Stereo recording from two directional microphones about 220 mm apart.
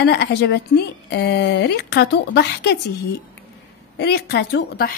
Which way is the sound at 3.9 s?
50° left (ahead or behind).